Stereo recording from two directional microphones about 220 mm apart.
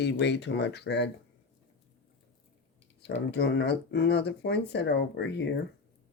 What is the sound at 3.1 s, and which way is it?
Speech, 55° left (ahead or behind).